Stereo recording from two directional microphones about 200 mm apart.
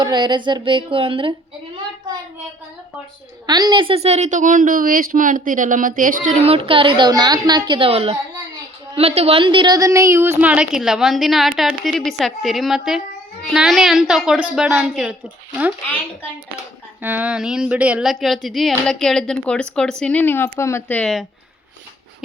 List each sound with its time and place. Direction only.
0.0 s a woman's voice: 20° right (ahead or behind)
3.4 s a woman's voice: 20° right (ahead or behind); by 15.1 s centre (ahead or behind)
17.0 s a woman's voice: 10° right (ahead or behind)